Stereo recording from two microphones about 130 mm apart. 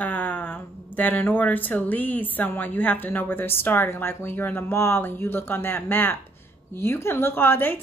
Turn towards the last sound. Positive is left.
turn(degrees=15)  # may be behind; listen again after turning